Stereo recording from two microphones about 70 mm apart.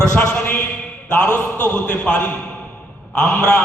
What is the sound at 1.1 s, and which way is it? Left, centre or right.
Speech, left.